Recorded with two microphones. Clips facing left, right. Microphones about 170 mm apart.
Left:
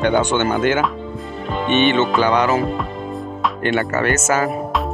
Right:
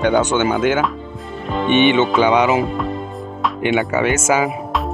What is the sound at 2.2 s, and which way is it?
Speech, 20° right (ahead or behind).